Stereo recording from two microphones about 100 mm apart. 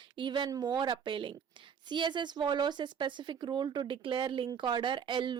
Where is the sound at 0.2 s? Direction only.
50° right (ahead or behind).